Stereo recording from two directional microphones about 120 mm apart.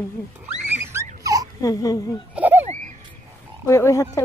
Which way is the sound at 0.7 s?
25° right (ahead or behind).